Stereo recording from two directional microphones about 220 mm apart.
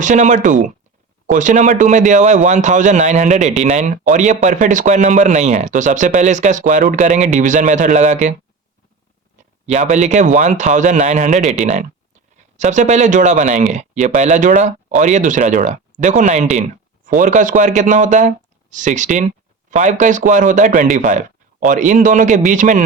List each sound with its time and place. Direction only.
0.0 s speech: 35° right (ahead or behind)
9.4 s a sound: 35° right (ahead or behind)
9.9 s speech: 35° right (ahead or behind)